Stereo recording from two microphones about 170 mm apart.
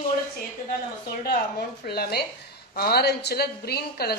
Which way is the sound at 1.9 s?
70° left (ahead or behind).